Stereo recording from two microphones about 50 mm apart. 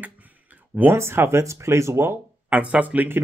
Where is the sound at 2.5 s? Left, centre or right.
Right.